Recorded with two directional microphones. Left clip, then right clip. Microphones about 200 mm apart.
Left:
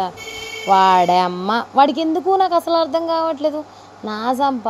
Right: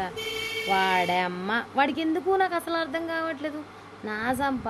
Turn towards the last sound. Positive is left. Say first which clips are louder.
# left 9 dB
turn(degrees=30)  # may be behind; listen again after turning